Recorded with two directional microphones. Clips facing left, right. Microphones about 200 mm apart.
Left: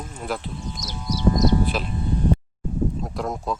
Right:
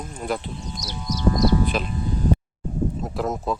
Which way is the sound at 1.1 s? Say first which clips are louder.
Even; 25° left (ahead or behind).